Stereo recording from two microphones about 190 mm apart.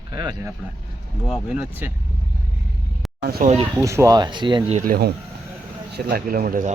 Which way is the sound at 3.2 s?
55° right (ahead or behind).